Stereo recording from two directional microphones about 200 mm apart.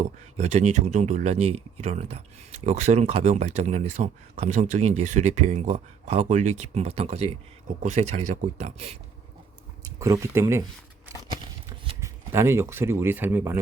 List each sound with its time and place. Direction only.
0.3 s speech: 35° right (ahead or behind)
9.8 s speech: 15° right (ahead or behind)
11.9 s speech: 15° right (ahead or behind)